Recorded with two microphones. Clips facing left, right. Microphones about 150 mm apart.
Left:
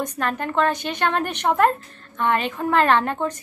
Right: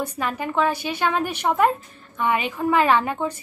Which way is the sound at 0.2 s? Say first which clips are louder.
Left 1 dB; 5° right (ahead or behind).